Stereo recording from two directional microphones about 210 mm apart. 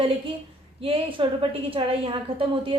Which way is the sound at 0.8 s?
25° right (ahead or behind).